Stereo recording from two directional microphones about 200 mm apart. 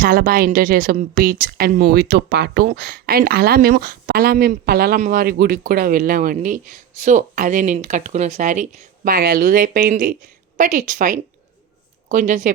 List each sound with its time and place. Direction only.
0.0 s a woman's voice: 45° right (ahead or behind)